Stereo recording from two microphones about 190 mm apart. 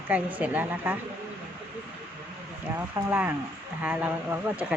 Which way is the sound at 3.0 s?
10° right (ahead or behind).